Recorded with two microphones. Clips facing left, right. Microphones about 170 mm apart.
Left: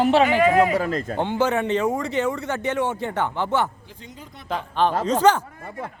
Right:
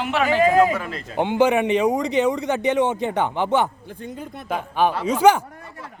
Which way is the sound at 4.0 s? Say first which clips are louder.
Right 9 dB; 55° right (ahead or behind).